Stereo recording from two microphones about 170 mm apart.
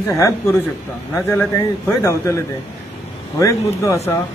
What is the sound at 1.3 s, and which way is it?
A man's voice, 15° left (ahead or behind).